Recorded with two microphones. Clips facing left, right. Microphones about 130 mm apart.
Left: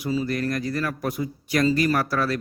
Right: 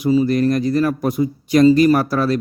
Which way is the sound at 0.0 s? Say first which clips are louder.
Right 10 dB; 20° right (ahead or behind).